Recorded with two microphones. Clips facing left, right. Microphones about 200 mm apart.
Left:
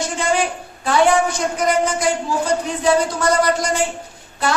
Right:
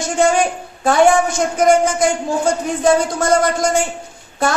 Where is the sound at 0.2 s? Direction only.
50° right (ahead or behind).